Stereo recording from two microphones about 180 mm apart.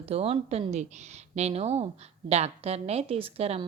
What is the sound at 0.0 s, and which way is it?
A woman's voice, 35° right (ahead or behind).